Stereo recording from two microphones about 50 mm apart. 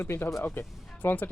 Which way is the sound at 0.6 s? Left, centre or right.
Left.